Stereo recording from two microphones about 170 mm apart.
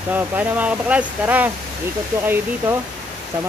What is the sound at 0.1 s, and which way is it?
Speech, 10° right (ahead or behind).